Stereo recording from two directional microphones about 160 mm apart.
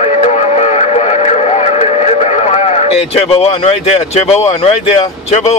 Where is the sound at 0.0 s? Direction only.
40° left (ahead or behind).